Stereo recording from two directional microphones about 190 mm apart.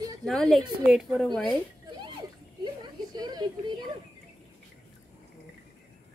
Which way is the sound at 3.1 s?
20° right (ahead or behind).